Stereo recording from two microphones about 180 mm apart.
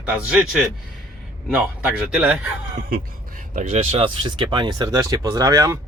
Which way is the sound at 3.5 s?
35° right (ahead or behind).